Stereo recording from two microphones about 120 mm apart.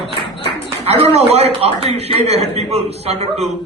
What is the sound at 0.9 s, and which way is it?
A man's voice, 60° right (ahead or behind).